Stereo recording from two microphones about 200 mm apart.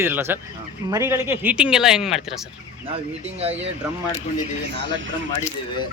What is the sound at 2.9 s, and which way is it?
Speech, 30° right (ahead or behind).